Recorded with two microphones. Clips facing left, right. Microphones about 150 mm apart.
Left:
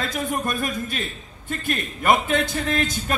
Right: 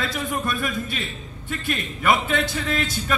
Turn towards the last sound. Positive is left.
turn(degrees=45)  # may be behind; listen again after turning